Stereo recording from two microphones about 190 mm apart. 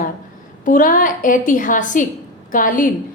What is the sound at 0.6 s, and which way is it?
A woman's voice, 45° left (ahead or behind).